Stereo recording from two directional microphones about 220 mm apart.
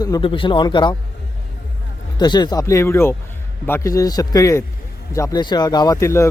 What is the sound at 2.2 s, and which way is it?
Speech, 20° left (ahead or behind).